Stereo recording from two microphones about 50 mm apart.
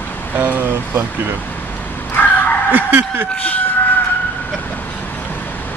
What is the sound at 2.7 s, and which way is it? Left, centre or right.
Speech, right.